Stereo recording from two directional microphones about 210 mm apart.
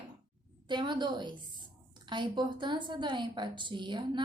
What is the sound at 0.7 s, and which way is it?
A woman's voice, 20° right (ahead or behind).